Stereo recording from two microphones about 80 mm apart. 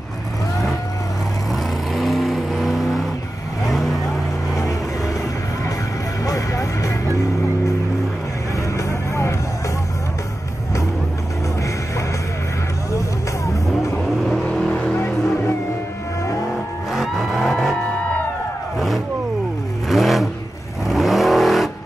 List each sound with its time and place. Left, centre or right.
1.5 s vehicle: centre
6.2 s music: left
8.7 s vehicle: left
14.2 s vehicle: centre
15.0 s music: left
16.9 s vehicle: centre
19.9 s vehicle: centre